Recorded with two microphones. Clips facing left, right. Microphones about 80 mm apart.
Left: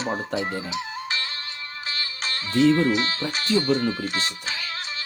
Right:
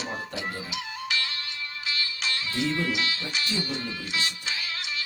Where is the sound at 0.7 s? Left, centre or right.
Left.